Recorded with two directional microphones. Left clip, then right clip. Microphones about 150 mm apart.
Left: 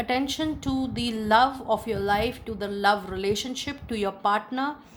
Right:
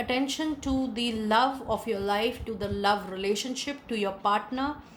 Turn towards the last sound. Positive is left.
turn(degrees=45)  # may be behind; listen again after turning